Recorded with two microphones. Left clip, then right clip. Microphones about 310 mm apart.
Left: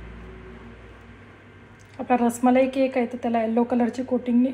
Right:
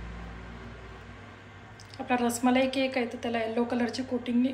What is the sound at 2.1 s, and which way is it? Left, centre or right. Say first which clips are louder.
A woman's voice: left 6 dB; centre.